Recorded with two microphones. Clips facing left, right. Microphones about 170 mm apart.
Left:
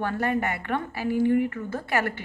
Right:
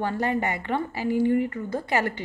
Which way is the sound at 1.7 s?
15° right (ahead or behind).